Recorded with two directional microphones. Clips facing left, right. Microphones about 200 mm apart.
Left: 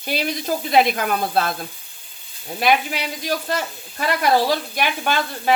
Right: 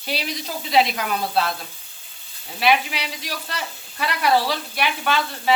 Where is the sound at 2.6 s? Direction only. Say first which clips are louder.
Left 1 dB; 45° left (ahead or behind).